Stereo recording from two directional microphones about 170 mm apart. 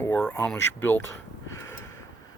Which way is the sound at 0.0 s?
10° left (ahead or behind).